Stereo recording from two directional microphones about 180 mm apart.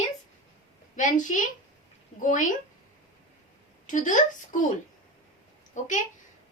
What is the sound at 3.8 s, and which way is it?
Speech, 45° left (ahead or behind).